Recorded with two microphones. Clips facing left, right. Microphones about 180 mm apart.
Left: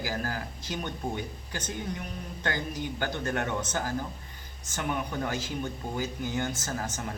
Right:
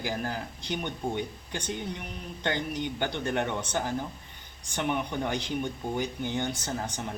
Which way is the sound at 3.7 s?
20° right (ahead or behind).